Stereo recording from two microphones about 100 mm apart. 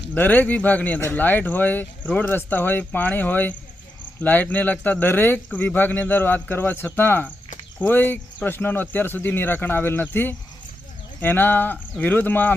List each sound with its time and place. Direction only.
0.1 s speech: 20° left (ahead or behind)